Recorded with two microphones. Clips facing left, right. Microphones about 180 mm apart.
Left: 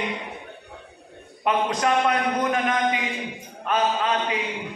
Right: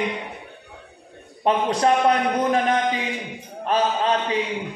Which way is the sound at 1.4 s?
30° right (ahead or behind).